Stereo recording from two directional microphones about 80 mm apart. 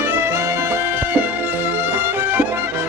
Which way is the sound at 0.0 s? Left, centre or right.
Right.